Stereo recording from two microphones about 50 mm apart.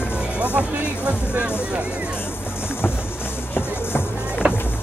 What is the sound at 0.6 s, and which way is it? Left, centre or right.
Music, right.